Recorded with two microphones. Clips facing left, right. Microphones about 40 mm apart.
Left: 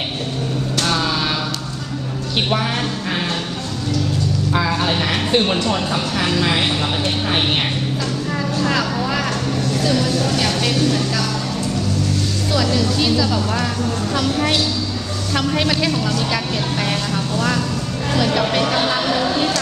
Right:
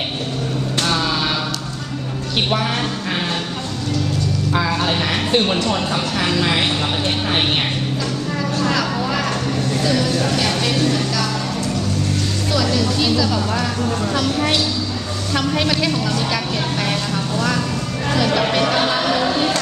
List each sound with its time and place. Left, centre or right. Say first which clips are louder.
0.9 s a sound: even; centre
2.5 s speech: even; centre
4.5 s speech: even; centre
8.8 s a sound: even; centre
9.8 s speech: even; centre
13.0 s speech: even; centre
16.8 s vehicle: even; centre
18.3 s speech: right 1 dB; centre
18.5 s music: right 1 dB; centre